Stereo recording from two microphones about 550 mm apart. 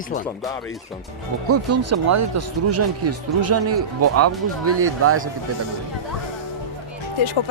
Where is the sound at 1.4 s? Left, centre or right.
Right.